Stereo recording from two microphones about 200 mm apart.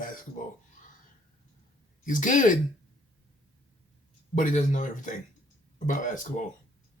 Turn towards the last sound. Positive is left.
turn(degrees=40)  # may be behind; listen again after turning